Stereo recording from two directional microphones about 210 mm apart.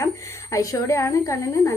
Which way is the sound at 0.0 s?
15° left (ahead or behind).